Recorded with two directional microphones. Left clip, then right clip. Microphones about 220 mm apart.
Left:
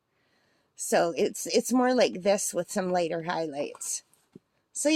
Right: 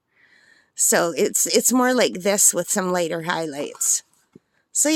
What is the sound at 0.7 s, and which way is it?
Speech, 35° right (ahead or behind).